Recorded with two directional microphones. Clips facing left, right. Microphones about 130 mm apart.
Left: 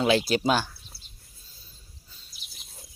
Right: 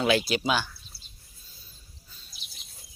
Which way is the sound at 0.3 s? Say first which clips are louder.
Left 3 dB; 40° left (ahead or behind).